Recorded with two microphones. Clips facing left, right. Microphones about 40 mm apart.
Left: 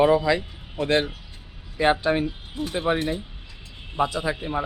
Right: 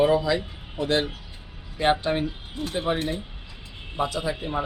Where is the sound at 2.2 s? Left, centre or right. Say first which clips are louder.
Left 1 dB; centre.